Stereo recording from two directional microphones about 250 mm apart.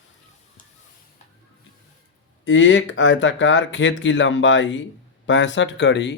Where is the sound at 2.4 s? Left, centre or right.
Left.